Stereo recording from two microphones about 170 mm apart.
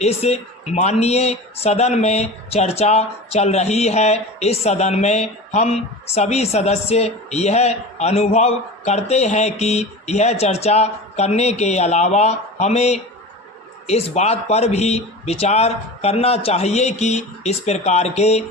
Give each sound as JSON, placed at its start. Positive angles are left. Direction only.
{"t": 0.0, "sound": "speech", "side_deg": 40}